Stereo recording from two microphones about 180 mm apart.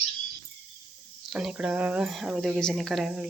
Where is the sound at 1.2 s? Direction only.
5° right (ahead or behind).